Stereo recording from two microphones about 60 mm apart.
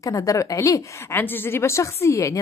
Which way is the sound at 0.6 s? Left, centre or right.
Left.